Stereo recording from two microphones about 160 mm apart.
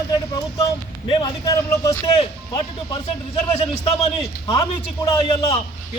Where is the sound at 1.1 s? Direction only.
25° left (ahead or behind).